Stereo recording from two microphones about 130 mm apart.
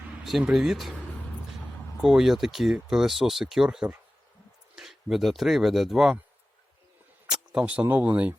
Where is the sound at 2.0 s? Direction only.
5° right (ahead or behind).